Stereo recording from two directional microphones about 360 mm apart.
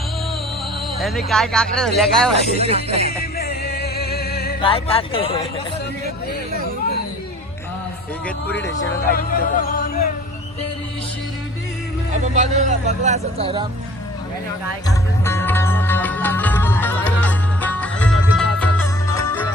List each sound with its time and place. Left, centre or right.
0.9 s speech: centre
2.6 s speech: centre
3.1 s music: left
4.6 s speech: centre
9.0 s speech: left
12.2 s speech: centre
14.8 s music: centre